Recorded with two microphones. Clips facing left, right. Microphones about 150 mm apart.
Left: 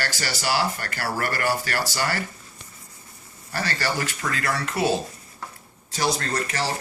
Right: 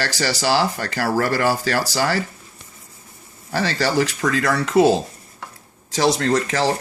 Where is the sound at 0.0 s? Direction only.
90° right.